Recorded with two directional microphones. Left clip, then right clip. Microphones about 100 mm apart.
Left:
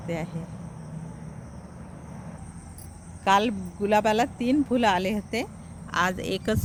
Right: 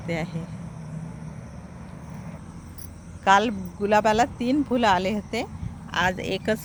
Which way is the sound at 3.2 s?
25° left (ahead or behind).